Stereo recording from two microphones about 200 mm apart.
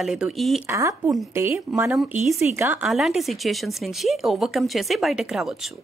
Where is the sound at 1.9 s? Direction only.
Centre (ahead or behind).